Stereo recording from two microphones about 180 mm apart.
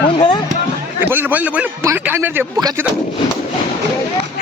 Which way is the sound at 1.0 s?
10° right (ahead or behind).